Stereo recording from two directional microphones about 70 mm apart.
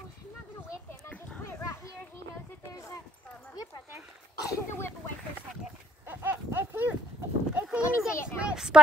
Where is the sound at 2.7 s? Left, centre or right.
Left.